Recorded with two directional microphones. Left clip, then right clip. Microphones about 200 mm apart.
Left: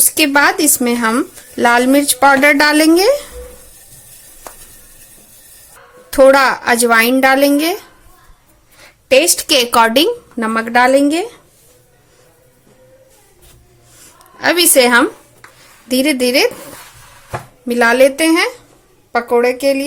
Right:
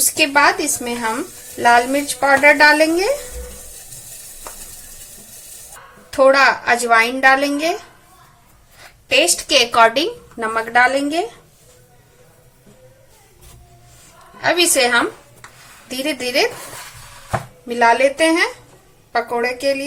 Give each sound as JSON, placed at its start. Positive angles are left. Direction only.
{"t": 0.1, "sound": "speech", "side_deg": 45}
{"t": 6.1, "sound": "speech", "side_deg": 45}
{"t": 9.0, "sound": "speech", "side_deg": 45}
{"t": 14.4, "sound": "speech", "side_deg": 50}
{"t": 17.7, "sound": "speech", "side_deg": 50}